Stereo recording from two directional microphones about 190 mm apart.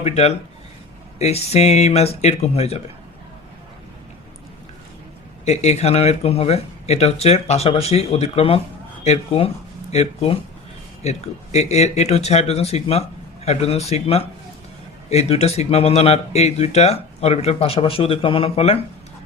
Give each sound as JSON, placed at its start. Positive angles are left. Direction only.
{"t": 0.0, "sound": "speech", "side_deg": 35}
{"t": 5.5, "sound": "speech", "side_deg": 35}